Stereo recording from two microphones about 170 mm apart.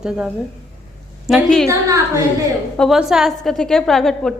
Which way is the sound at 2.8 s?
Centre (ahead or behind).